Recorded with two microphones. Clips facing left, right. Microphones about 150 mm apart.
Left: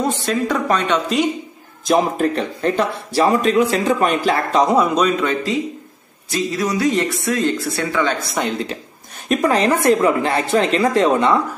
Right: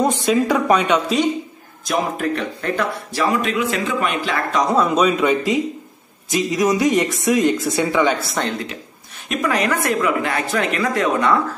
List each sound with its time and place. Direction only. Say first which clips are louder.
0.0 s a woman's voice: right 3 dB; 15° right (ahead or behind)
1.9 s speech: left 4 dB; 30° left (ahead or behind)
4.7 s a woman's voice: even; centre (ahead or behind)
9.3 s speech: left 4 dB; 35° left (ahead or behind)